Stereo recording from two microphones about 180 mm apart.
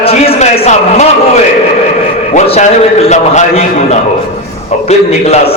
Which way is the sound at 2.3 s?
35° left (ahead or behind).